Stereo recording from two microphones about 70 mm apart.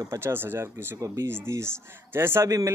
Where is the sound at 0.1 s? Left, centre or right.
Right.